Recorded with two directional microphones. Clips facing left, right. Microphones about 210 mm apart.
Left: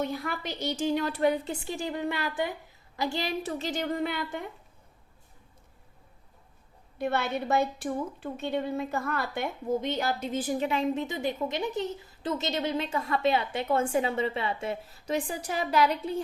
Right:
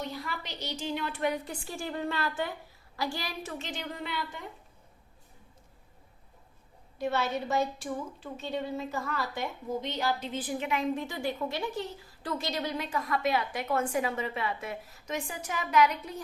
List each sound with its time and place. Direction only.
0.0 s a woman's voice: 50° left (ahead or behind); by 3.5 s 25° left (ahead or behind)
3.6 s a sound: 40° left (ahead or behind)
7.0 s a woman's voice: 60° left (ahead or behind)
10.7 s a woman's voice: 25° left (ahead or behind)